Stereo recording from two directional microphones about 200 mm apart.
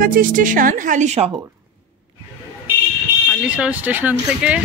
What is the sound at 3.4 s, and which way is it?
Speech, 5° right (ahead or behind).